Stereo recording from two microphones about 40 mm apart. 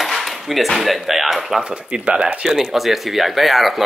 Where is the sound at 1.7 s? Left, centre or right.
Right.